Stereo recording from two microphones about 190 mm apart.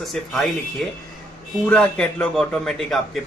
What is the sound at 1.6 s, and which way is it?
Speech, 5° left (ahead or behind).